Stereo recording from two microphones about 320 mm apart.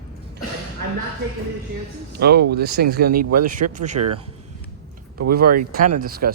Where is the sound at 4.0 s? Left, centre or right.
Right.